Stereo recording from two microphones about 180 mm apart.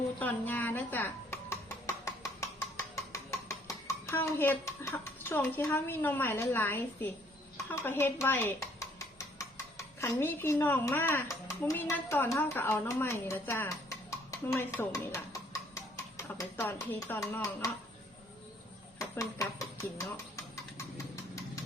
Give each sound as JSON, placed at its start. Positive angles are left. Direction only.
{"t": 0.2, "sound": "music", "side_deg": 10}
{"t": 7.5, "sound": "speech", "side_deg": 15}
{"t": 18.9, "sound": "dishes", "side_deg": 20}